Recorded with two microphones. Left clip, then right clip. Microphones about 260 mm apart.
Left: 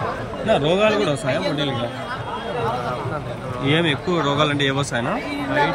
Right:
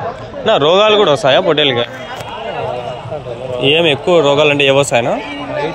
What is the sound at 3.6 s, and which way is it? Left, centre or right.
Speech, right.